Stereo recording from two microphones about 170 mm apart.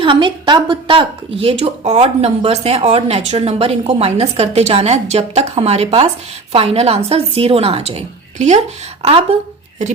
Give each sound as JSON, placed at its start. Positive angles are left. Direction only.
{"t": 0.0, "sound": "speech", "side_deg": -30}